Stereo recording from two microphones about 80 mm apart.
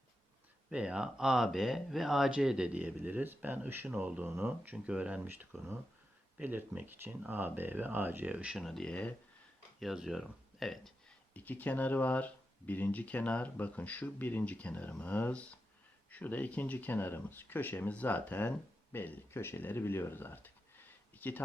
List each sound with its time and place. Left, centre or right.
0.7 s speech: centre
8.5 s speech: centre
9.8 s speech: centre
11.3 s speech: left